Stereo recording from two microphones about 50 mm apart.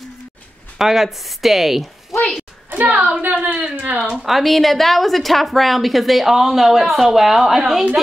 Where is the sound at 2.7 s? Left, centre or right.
Right.